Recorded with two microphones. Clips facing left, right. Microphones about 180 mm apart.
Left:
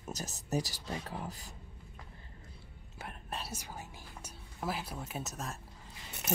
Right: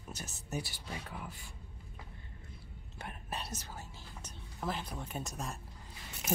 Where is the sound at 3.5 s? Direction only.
15° left (ahead or behind).